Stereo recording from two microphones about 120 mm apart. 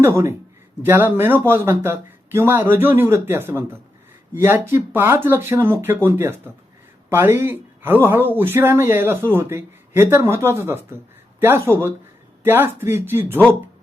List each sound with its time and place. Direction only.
0.0 s speech: 20° right (ahead or behind)